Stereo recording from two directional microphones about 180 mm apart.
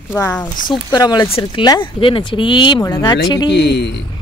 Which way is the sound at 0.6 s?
25° left (ahead or behind).